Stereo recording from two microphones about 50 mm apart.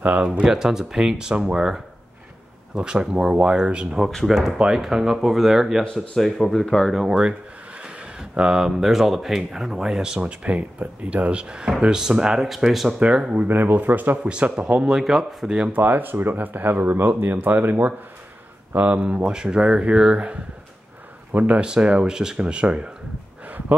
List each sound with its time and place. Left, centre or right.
0.4 s speech: centre
4.3 s speech: centre
6.1 s speech: centre
6.9 s speech: centre
10.2 s speech: right; by 12.9 s centre
13.0 s speech: right
13.5 s speech: right
14.9 s speech: centre
15.7 s speech: right; by 20.3 s centre
21.5 s speech: centre